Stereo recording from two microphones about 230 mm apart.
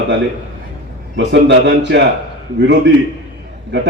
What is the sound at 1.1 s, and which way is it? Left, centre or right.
Speech, right.